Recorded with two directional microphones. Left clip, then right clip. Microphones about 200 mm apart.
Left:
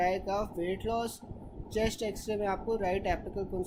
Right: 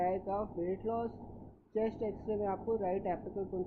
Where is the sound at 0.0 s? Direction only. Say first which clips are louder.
Left 4 dB; 20° left (ahead or behind).